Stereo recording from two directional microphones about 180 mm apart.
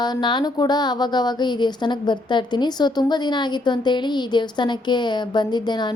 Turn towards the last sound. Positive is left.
turn(degrees=25)  # may be behind; listen again after turning